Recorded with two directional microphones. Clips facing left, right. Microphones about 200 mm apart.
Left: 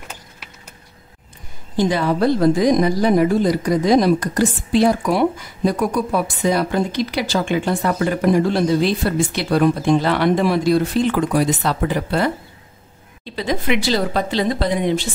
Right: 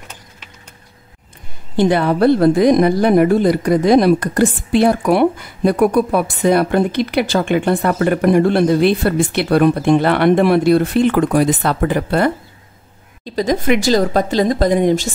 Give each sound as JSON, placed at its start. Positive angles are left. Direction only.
{"t": 1.8, "sound": "a woman's voice", "side_deg": -60}